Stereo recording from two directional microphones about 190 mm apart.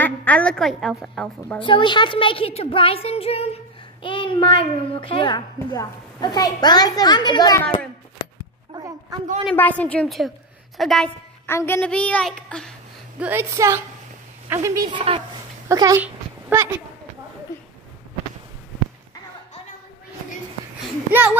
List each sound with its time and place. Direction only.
0.0 s a woman's voice: 10° left (ahead or behind)
1.6 s speech: 25° left (ahead or behind)
8.7 s a sound: 20° right (ahead or behind)
9.5 s a woman's voice: 10° left (ahead or behind)
11.4 s a woman's voice: 10° left (ahead or behind)
13.2 s a woman's voice: 10° right (ahead or behind)
21.1 s a woman's voice: 10° right (ahead or behind)